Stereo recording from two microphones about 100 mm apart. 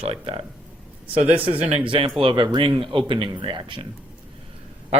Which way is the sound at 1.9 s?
65° right (ahead or behind).